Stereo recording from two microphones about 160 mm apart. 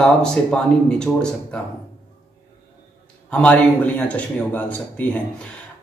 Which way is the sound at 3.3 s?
5° left (ahead or behind).